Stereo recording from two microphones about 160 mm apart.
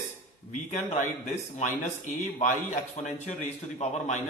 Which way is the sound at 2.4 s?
45° left (ahead or behind).